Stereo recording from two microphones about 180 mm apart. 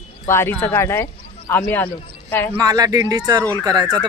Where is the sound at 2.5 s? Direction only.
20° right (ahead or behind).